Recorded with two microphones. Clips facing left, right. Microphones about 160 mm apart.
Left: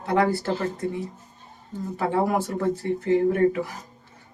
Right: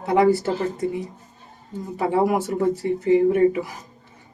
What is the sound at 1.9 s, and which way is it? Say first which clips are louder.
Speech: right 3 dB; 15° right (ahead or behind).